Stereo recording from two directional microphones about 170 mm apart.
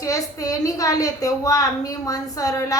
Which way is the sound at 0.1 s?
20° left (ahead or behind).